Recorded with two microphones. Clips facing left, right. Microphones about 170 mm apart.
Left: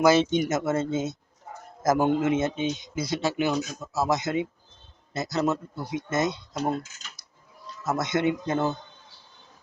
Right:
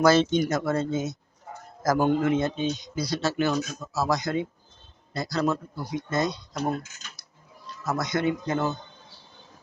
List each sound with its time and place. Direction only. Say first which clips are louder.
0.0 s a man's voice: even; 15° left (ahead or behind)
7.9 s a man's voice: left 1 dB; 25° left (ahead or behind)